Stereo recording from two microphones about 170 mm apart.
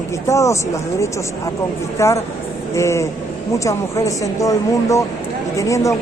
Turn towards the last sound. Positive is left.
turn(degrees=20)  # may be behind; listen again after turning